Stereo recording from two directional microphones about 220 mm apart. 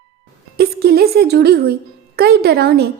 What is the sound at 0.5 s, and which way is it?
A woman's voice, 45° right (ahead or behind).